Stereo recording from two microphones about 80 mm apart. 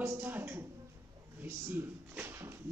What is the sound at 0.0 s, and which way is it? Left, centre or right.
A woman's voice, right.